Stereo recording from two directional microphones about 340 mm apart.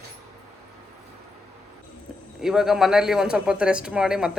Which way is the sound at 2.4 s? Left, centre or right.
Centre.